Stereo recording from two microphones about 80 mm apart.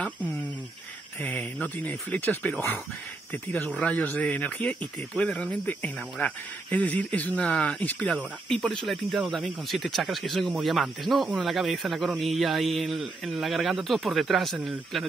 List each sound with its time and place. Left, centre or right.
1.2 s speech: left
3.8 s speech: centre
8.5 s speech: centre